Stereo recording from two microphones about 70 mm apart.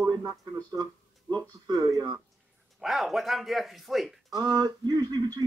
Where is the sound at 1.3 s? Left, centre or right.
Right.